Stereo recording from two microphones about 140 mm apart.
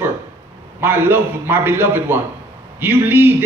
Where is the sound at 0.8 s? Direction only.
15° right (ahead or behind).